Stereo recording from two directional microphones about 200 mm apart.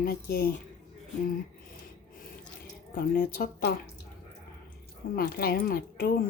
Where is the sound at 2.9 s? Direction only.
45° left (ahead or behind).